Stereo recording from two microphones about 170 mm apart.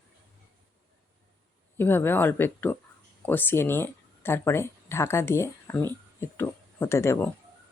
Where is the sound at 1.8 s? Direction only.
10° left (ahead or behind).